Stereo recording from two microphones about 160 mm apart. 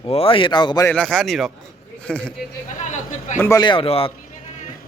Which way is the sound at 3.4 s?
20° left (ahead or behind).